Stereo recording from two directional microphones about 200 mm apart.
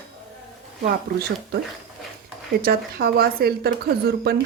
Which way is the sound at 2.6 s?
50° right (ahead or behind).